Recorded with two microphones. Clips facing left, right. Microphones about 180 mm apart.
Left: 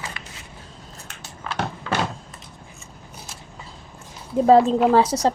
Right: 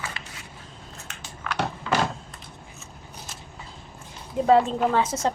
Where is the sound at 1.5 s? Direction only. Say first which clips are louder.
Left 1 dB; 30° left (ahead or behind).